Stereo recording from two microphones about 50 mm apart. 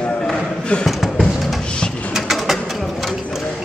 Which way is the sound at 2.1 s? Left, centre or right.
Centre.